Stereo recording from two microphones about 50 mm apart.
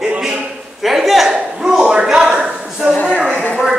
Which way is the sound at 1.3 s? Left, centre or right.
Centre.